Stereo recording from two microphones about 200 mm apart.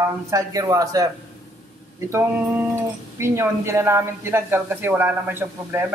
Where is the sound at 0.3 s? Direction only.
15° right (ahead or behind).